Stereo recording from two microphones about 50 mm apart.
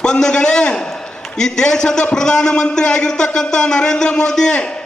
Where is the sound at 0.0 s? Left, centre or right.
Centre.